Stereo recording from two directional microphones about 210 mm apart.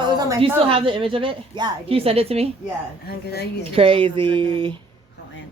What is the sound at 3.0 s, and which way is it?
Speech, 50° left (ahead or behind).